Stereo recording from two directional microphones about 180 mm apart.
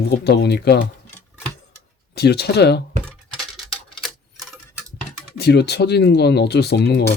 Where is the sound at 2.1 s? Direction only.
65° left (ahead or behind).